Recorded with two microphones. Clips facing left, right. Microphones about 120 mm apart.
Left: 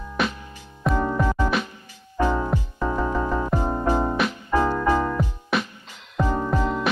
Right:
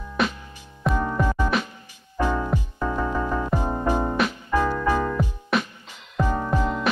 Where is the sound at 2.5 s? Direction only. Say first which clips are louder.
Left 1 dB; 20° left (ahead or behind).